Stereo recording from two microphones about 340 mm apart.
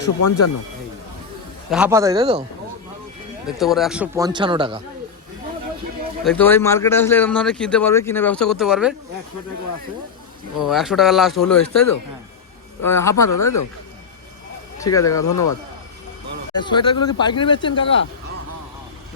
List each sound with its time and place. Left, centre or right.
0.2 s speech: left
1.7 s a man's voice: centre
3.4 s a man's voice: centre
6.2 s speech: centre
10.6 s speech: centre
13.2 s speech: left
14.8 s speech: centre
15.2 s speech: left
16.6 s speech: centre